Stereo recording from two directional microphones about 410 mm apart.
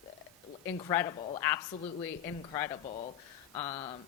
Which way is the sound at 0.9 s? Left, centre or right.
Centre.